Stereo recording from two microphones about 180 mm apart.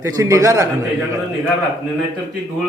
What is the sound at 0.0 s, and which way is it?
Speech, 15° right (ahead or behind).